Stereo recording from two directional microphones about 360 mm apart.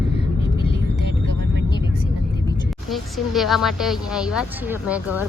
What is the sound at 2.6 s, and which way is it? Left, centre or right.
Speech, centre.